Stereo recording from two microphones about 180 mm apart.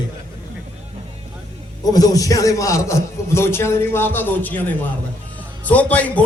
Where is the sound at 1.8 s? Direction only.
20° left (ahead or behind).